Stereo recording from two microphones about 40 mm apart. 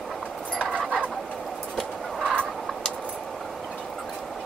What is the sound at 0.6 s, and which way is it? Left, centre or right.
Fowl, right.